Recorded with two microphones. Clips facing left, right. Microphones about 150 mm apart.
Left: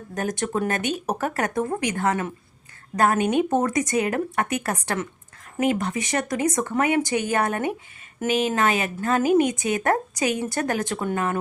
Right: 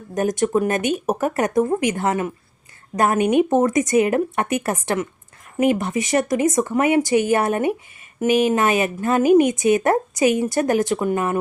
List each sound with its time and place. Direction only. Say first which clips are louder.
0.1 s speech: right 7 dB; 20° right (ahead or behind)